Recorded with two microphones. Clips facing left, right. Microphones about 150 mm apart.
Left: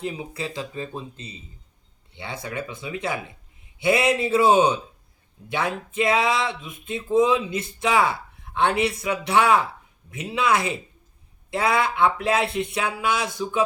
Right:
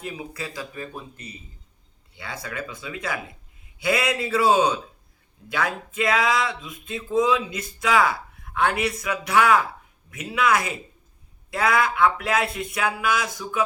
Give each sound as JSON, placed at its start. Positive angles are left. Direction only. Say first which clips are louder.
{"t": 0.0, "sound": "speech", "louder": "left 3 dB", "side_deg": 25}